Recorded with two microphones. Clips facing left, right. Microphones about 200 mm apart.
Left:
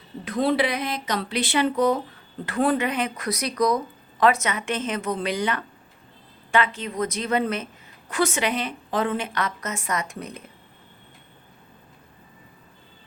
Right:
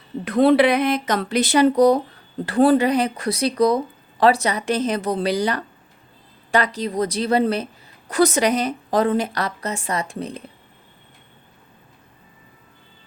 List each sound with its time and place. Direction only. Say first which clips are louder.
0.3 s a woman's voice: right 8 dB; 60° right (ahead or behind); by 10.4 s 30° right (ahead or behind)